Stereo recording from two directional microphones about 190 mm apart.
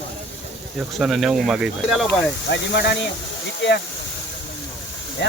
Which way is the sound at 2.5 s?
60° left (ahead or behind).